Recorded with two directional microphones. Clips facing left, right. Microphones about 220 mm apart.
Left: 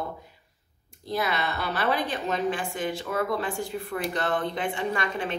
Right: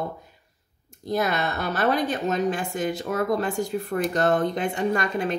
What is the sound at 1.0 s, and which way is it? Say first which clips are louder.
A woman's voice: right 4 dB; 45° right (ahead or behind).